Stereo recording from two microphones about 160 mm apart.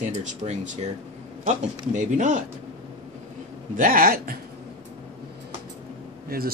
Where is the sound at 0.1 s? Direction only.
50° right (ahead or behind).